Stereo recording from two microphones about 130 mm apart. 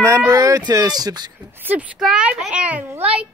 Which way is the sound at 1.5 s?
15° right (ahead or behind).